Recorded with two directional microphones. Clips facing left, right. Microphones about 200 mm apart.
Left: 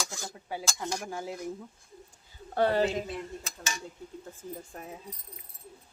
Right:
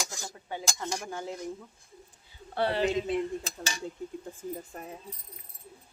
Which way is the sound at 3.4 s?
35° right (ahead or behind).